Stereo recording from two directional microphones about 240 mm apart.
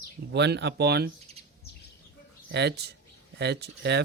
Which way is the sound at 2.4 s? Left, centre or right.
Right.